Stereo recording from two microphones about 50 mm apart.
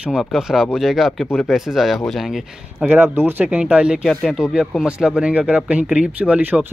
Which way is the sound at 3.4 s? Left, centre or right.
Right.